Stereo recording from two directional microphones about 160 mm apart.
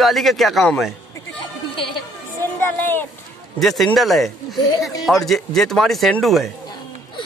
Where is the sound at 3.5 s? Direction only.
Centre (ahead or behind).